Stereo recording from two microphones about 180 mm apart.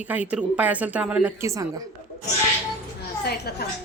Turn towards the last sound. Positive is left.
turn(degrees=65)  # may be behind; listen again after turning